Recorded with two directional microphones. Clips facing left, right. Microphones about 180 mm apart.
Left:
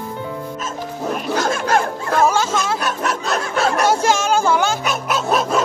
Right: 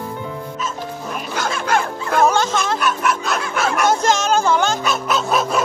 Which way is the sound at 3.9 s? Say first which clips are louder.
Even; 10° left (ahead or behind).